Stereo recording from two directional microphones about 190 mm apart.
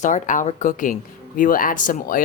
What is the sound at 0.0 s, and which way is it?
Speech, 40° left (ahead or behind).